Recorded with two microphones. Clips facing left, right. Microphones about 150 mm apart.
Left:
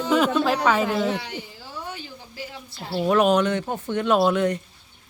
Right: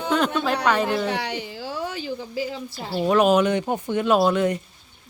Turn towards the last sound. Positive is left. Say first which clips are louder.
# right 1 dB
turn(degrees=-5)  # may be behind; listen again after turning